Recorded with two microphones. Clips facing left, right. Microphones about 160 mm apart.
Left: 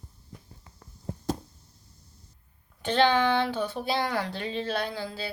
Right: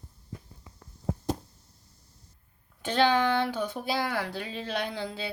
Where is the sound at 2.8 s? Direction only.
10° right (ahead or behind).